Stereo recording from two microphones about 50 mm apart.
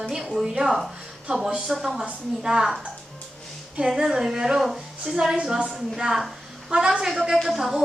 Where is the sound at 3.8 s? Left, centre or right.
Centre.